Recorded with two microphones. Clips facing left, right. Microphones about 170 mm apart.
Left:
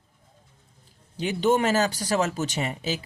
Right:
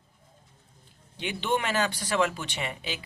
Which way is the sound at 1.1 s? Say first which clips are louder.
Left 7 dB; 40° left (ahead or behind).